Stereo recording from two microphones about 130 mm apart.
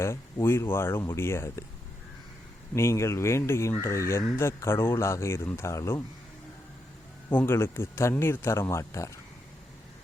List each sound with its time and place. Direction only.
0.0 s speech: 20° left (ahead or behind)
2.7 s speech: 20° left (ahead or behind)
7.3 s speech: 15° left (ahead or behind)